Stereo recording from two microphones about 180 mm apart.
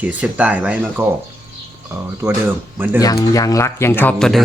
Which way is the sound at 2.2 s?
10° right (ahead or behind).